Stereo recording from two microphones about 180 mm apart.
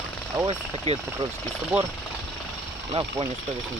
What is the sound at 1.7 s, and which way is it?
Speech, 5° right (ahead or behind).